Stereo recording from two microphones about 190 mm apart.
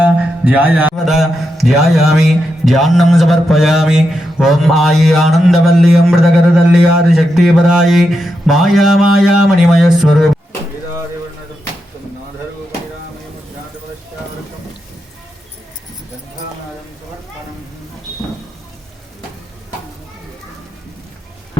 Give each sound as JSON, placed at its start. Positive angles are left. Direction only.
{"t": 0.0, "sound": "a man's voice", "side_deg": -10}